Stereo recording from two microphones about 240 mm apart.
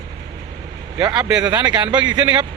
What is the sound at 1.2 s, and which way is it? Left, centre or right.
Speech, centre.